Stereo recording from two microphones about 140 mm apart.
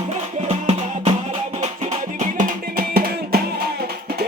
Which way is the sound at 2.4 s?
90° right.